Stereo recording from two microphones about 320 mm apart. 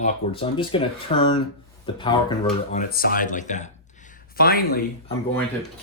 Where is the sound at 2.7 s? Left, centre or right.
Left.